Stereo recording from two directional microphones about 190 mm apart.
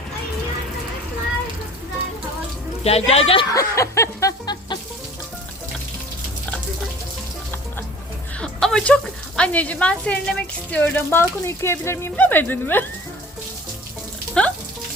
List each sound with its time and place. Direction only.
2.8 s speech: 35° left (ahead or behind)
3.5 s speech: 15° left (ahead or behind)
8.4 s speech: 5° left (ahead or behind)
14.4 s frying: 5° left (ahead or behind)